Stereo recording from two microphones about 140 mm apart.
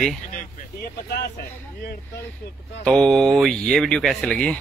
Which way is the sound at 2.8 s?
5° left (ahead or behind).